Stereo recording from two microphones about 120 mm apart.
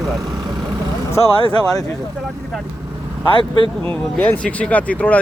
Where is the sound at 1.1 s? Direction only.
25° left (ahead or behind).